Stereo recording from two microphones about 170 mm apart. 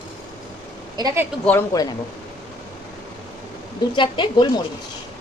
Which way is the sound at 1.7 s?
20° left (ahead or behind).